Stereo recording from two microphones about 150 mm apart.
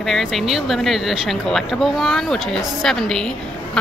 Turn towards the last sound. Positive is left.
turn(degrees=5)  # may be behind; listen again after turning